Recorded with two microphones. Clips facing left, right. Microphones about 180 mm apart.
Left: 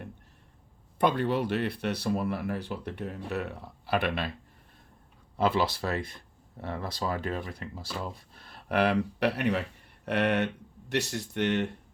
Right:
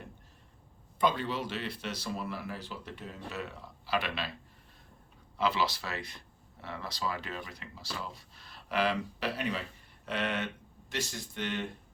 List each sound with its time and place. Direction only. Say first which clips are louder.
0.9 s speech: left 5 dB; 60° left (ahead or behind)
5.4 s speech: left 4 dB; 55° left (ahead or behind)